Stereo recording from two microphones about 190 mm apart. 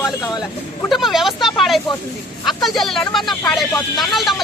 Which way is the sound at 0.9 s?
Centre (ahead or behind).